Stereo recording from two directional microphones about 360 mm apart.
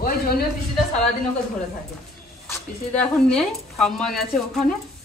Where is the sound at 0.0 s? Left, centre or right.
Left.